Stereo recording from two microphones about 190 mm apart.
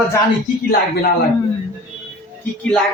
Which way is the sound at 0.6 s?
55° left (ahead or behind).